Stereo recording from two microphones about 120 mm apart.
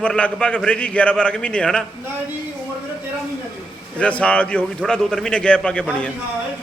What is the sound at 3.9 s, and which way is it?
Speech, 10° left (ahead or behind).